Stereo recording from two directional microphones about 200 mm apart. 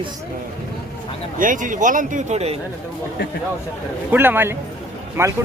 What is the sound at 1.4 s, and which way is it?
Speech, 40° right (ahead or behind).